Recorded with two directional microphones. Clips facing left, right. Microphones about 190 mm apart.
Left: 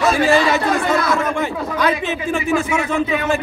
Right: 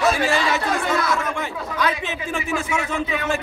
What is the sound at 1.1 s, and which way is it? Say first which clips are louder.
Speech: left 5 dB; 50° left (ahead or behind).